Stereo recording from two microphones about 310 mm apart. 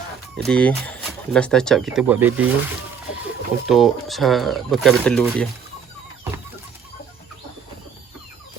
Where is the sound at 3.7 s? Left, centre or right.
Centre.